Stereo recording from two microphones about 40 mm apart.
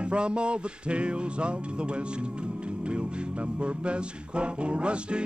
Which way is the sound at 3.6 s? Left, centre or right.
Right.